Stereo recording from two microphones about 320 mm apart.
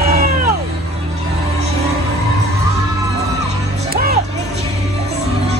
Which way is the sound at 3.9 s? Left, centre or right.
Right.